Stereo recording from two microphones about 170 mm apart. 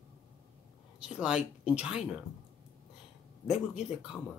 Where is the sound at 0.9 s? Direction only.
5° right (ahead or behind).